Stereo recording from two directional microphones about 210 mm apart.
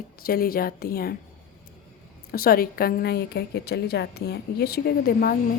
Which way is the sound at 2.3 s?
45° left (ahead or behind).